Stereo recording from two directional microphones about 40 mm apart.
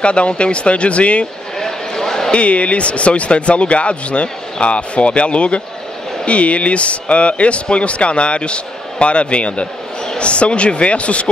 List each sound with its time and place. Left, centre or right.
0.0 s speech: left
1.6 s a sound: centre
2.3 s speech: left